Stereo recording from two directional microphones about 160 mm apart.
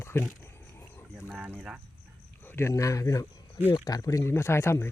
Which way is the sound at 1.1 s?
5° right (ahead or behind).